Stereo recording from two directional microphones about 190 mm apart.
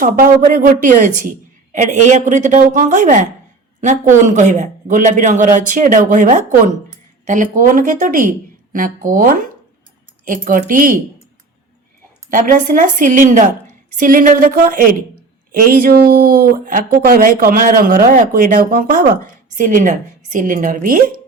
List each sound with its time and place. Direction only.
0.0 s a man's voice: 45° right (ahead or behind)
12.3 s speech: 45° right (ahead or behind)